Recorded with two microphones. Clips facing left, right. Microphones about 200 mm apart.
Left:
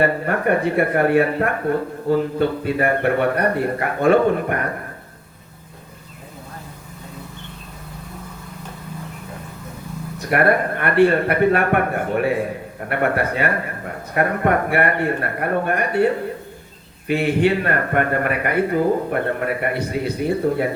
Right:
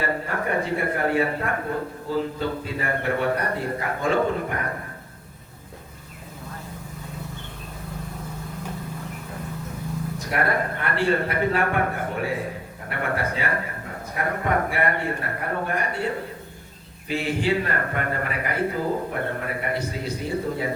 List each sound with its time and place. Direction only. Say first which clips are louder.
0.0 s a man's voice: left 8 dB; 60° left (ahead or behind)
10.2 s a man's voice: left 8 dB; 65° left (ahead or behind)
17.1 s a man's voice: left 6 dB; 60° left (ahead or behind)